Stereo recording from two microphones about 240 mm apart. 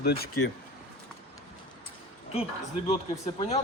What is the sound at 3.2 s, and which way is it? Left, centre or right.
Speech, left.